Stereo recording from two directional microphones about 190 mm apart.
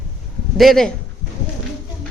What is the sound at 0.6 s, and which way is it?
Speech, centre (ahead or behind).